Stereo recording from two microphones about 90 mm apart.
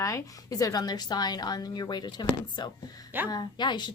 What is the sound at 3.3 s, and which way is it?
Speech, 50° left (ahead or behind).